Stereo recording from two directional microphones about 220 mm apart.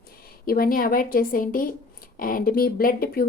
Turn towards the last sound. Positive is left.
turn(degrees=40)  # may be behind; listen again after turning